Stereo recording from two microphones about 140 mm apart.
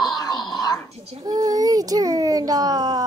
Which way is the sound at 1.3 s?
25° right (ahead or behind).